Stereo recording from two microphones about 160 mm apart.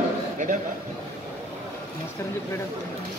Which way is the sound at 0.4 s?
55° right (ahead or behind).